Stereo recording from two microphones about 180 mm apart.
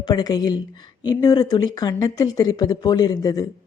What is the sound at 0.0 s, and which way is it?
Speech, 25° left (ahead or behind).